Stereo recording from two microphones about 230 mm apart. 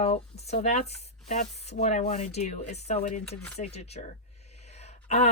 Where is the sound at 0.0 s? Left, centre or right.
Left.